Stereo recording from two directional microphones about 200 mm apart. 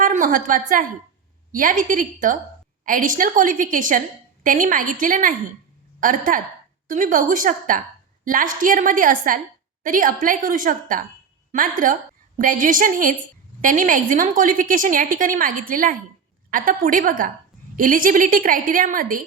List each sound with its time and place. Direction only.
0.0 s a woman's voice: 40° right (ahead or behind)